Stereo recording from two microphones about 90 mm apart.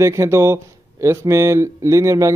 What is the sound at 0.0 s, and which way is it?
A man's voice, 30° right (ahead or behind).